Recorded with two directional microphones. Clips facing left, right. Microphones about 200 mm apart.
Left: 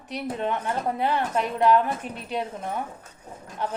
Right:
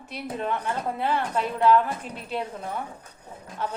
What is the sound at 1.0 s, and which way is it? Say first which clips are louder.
Speech: even; 15° left (ahead or behind).